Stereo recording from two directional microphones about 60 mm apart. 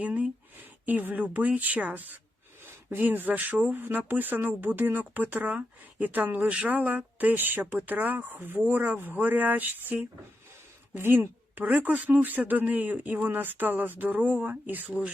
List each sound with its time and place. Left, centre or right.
0.0 s speech: right